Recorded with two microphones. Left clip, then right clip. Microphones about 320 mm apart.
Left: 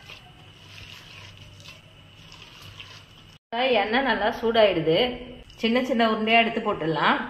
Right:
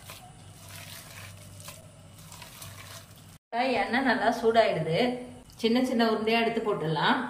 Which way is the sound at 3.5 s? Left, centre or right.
Centre.